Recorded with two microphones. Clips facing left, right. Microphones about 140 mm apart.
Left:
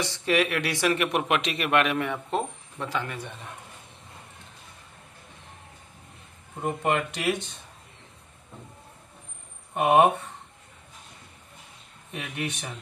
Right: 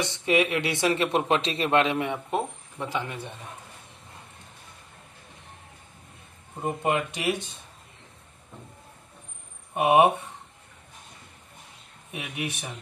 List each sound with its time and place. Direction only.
0.0 s speech: 20° right (ahead or behind)
6.6 s speech: 15° right (ahead or behind)
9.8 s speech: 10° right (ahead or behind)
12.1 s speech: 5° right (ahead or behind)